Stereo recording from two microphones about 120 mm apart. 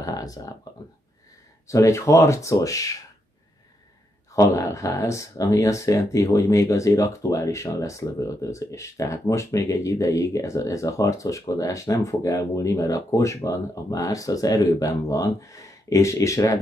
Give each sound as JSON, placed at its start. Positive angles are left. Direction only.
{"t": 0.0, "sound": "a sound", "side_deg": 30}
{"t": 0.7, "sound": "speech", "side_deg": 30}
{"t": 4.3, "sound": "speech", "side_deg": 25}